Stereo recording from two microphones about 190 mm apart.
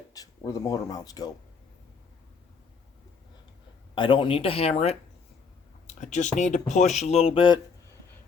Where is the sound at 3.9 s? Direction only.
25° left (ahead or behind).